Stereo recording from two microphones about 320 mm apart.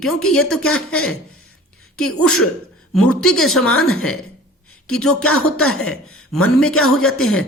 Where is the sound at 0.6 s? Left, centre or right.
Left.